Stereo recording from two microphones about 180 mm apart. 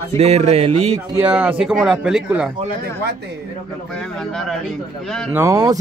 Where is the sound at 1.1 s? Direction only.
10° right (ahead or behind).